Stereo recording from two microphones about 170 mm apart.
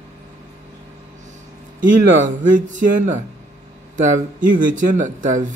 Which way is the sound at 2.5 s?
50° right (ahead or behind).